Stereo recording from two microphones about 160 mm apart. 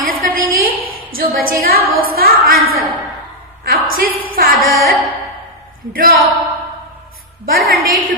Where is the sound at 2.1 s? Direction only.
70° right (ahead or behind).